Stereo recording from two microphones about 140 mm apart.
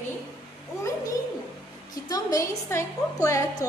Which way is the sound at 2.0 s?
25° left (ahead or behind).